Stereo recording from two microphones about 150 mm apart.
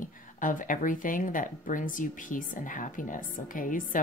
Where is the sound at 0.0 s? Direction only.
60° left (ahead or behind).